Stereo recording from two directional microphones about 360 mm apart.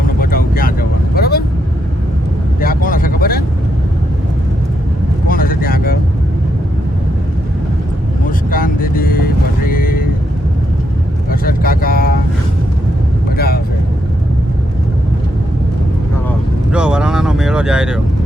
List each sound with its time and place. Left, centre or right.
0.2 s vehicle: left
2.6 s vehicle: left
5.3 s vehicle: left
8.4 s vehicle: left
11.3 s vehicle: left
13.3 s vehicle: left
16.7 s vehicle: centre